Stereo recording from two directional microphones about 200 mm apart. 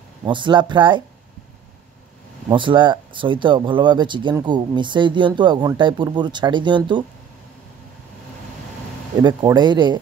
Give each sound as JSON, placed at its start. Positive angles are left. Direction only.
{"t": 0.2, "sound": "speech", "side_deg": -25}
{"t": 2.5, "sound": "speech", "side_deg": -25}
{"t": 9.2, "sound": "speech", "side_deg": -20}